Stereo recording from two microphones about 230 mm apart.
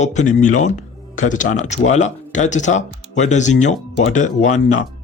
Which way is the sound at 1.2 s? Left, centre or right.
Left.